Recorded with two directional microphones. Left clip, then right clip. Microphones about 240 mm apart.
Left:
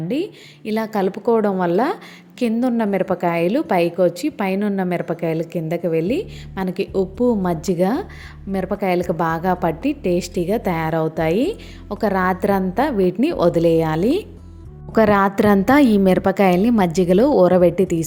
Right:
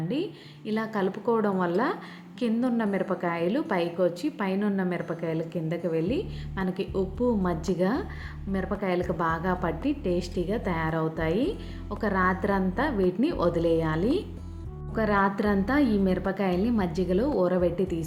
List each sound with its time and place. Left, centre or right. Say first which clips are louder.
0.1 s a woman's voice: left 9 dB; left